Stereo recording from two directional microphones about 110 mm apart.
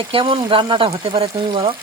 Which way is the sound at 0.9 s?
60° right (ahead or behind).